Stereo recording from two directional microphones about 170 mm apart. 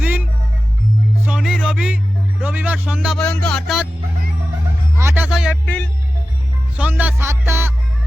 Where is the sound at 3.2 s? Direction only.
5° left (ahead or behind).